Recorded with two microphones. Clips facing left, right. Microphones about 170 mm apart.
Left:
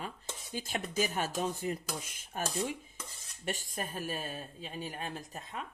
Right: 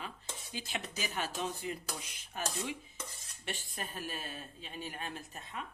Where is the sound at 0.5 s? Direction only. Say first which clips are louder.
Left 7 dB; 45° left (ahead or behind).